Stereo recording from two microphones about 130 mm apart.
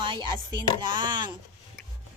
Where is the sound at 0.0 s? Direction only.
40° right (ahead or behind).